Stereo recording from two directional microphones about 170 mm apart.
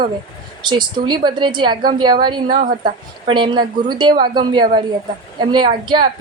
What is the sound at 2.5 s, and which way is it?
Speech, 50° right (ahead or behind).